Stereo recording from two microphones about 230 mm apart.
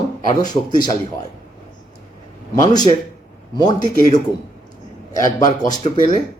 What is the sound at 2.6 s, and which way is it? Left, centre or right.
A man's voice, centre.